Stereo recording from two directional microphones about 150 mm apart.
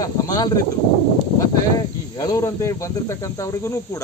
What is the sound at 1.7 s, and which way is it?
Speech, 25° left (ahead or behind).